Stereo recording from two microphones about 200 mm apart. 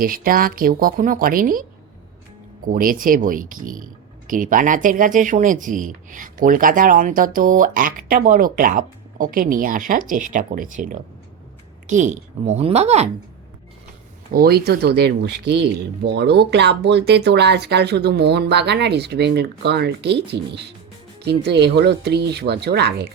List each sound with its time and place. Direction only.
0.0 s speech: 45° right (ahead or behind)
2.6 s speech: 45° right (ahead or behind)
14.3 s speech: 50° right (ahead or behind)